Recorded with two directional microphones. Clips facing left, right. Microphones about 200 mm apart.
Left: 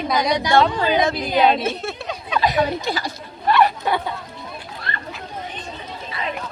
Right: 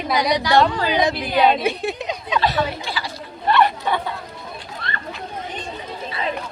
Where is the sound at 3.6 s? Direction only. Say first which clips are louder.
Left 1 dB; 10° left (ahead or behind).